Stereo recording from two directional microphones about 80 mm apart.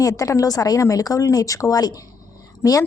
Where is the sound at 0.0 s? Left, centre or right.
Left.